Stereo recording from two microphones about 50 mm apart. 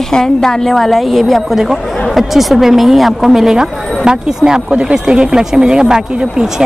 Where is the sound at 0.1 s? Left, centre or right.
Centre.